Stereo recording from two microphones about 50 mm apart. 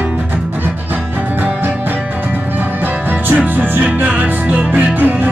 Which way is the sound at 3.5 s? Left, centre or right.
Right.